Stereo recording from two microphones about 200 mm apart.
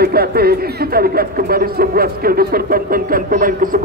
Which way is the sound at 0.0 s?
50° right (ahead or behind).